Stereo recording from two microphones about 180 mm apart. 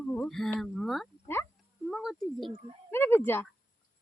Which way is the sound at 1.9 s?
Centre (ahead or behind).